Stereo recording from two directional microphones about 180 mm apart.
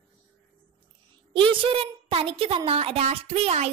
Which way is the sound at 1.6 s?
30° right (ahead or behind).